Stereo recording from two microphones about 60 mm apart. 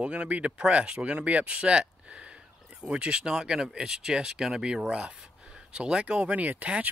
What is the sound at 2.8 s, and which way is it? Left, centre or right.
Speech, centre.